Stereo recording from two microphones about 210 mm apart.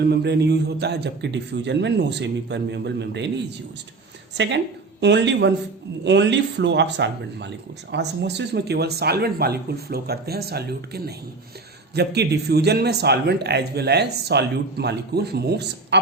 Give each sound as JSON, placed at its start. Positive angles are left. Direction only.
{"t": 0.0, "sound": "a man's voice", "side_deg": -50}